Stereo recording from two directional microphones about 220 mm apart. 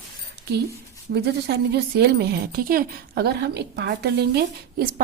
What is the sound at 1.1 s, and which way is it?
A woman's voice, 45° right (ahead or behind).